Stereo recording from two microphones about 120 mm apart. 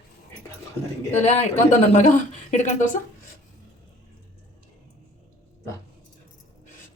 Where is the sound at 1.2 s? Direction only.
65° left (ahead or behind); by 3.0 s 90° left.